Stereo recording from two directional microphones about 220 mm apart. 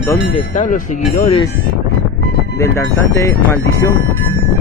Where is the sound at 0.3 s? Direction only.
35° left (ahead or behind).